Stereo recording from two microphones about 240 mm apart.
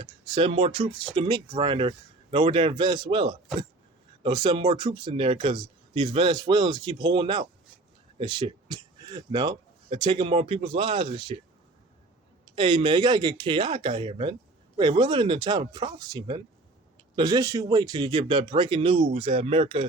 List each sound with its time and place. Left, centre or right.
0.0 s speech: right
12.5 s speech: right